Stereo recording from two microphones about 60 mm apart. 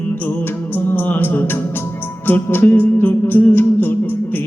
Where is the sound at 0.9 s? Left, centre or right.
Left.